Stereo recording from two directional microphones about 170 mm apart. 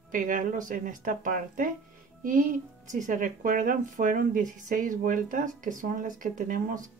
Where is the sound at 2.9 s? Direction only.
50° right (ahead or behind).